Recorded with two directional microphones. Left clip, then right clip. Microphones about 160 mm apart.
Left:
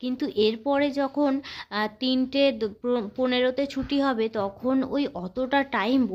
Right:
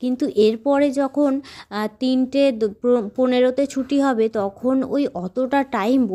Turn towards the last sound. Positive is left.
turn(degrees=-35)  # may be behind; listen again after turning